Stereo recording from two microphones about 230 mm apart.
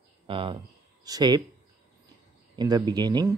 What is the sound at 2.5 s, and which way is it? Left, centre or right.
Speech, centre.